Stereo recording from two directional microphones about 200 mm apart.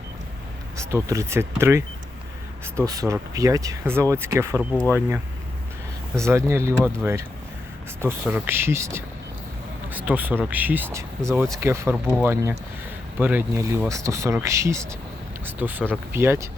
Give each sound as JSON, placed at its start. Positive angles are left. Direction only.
{"t": 0.8, "sound": "speech", "side_deg": -15}